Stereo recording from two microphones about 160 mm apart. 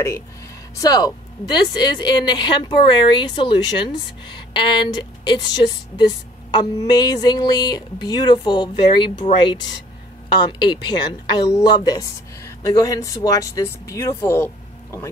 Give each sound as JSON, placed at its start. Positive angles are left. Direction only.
{"t": 0.7, "sound": "speech", "side_deg": 25}
{"t": 10.4, "sound": "speech", "side_deg": 30}